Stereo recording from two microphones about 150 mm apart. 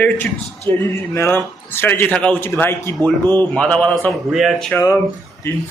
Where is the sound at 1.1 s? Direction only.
20° left (ahead or behind).